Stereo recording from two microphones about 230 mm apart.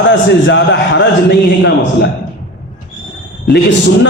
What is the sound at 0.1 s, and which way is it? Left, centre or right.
A man's voice, left.